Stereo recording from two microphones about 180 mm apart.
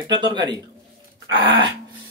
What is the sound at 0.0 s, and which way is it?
Speech, 25° right (ahead or behind).